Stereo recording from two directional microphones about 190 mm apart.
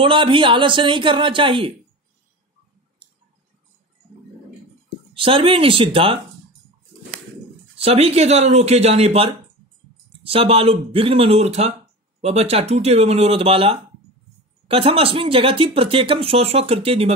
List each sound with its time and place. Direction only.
0.0 s speech: 25° right (ahead or behind)
5.1 s speech: 30° right (ahead or behind)
7.7 s speech: 30° right (ahead or behind)